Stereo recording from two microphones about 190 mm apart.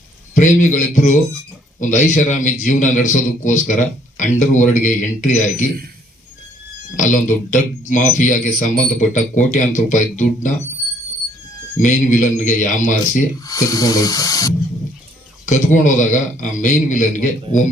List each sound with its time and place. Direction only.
0.3 s a man's voice: 40° left (ahead or behind)
6.9 s a man's voice: 40° left (ahead or behind)
11.8 s a man's voice: 40° left (ahead or behind)
13.4 s speech: 20° left (ahead or behind)
15.4 s a man's voice: 40° left (ahead or behind)